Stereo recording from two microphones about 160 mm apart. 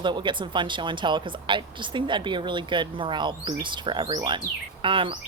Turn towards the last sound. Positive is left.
turn(degrees=-30)  # may be behind; listen again after turning